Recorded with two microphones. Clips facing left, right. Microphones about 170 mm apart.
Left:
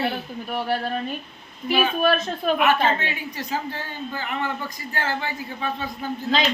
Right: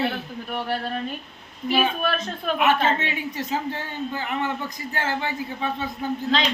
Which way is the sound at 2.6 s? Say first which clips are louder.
Right 2 dB; 25° right (ahead or behind).